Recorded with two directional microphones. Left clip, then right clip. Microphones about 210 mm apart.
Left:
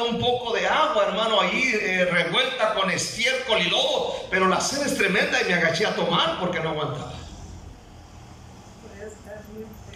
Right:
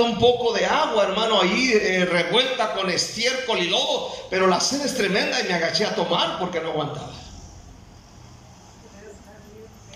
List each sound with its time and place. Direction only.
0.0 s a man's voice: 25° right (ahead or behind)